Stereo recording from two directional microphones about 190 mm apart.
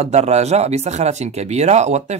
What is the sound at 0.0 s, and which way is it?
Speech, 35° right (ahead or behind).